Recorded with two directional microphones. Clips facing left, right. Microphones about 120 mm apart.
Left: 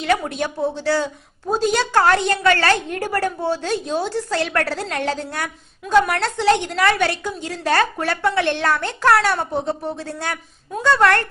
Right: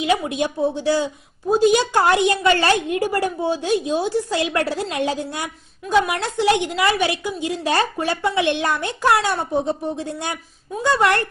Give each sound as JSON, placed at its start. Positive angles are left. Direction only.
{"t": 0.0, "sound": "a woman's voice", "side_deg": -15}